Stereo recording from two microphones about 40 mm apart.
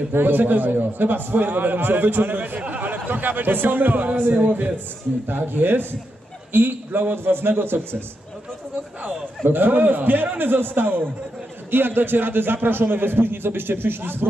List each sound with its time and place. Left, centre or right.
0.1 s a man's voice: right
5.2 s a man's voice: right
9.5 s a man's voice: right